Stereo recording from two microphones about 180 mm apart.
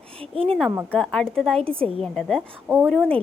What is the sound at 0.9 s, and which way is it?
Speech, centre (ahead or behind).